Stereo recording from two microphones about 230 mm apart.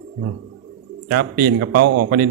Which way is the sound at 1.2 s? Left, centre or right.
Right.